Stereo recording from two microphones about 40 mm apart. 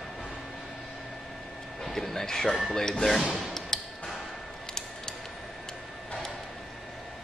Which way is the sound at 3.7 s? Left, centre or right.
Centre.